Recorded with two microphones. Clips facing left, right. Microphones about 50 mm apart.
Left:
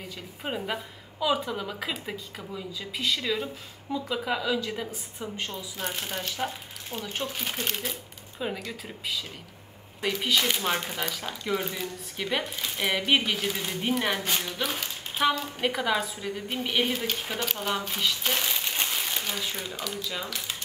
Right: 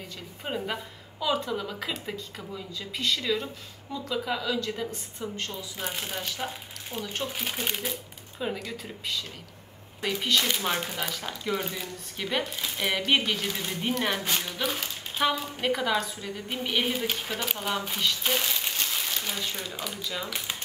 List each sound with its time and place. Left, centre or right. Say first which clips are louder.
0.0 s a woman's voice: left 2 dB; centre
5.8 s a woman's voice: left 1 dB; centre
20.2 s speech: right 1 dB; centre